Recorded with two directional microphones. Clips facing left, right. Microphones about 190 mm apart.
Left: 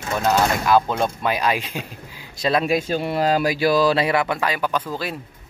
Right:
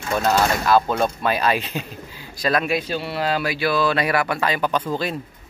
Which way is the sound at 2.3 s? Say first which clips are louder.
Left 1 dB; 25° left (ahead or behind).